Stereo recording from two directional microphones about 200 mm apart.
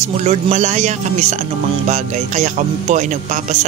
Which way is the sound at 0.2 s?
35° right (ahead or behind).